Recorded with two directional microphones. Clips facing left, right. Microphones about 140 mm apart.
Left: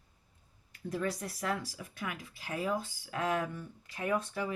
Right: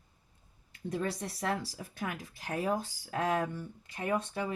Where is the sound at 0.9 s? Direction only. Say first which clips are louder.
Even; 30° right (ahead or behind).